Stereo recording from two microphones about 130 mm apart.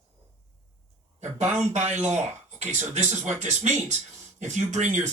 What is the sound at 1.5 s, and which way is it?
Speech, 60° right (ahead or behind).